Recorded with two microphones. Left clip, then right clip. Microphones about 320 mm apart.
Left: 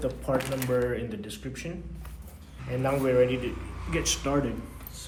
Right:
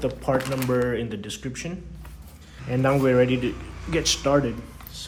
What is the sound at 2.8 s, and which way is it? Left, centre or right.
A man's voice, right.